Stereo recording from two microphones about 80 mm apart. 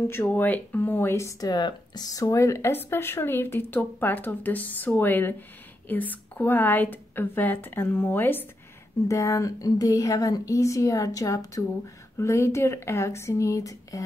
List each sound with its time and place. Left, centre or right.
0.0 s a woman's voice: left
1.4 s speech: left
2.0 s speech: left
2.7 s a woman's voice: left
9.0 s speech: left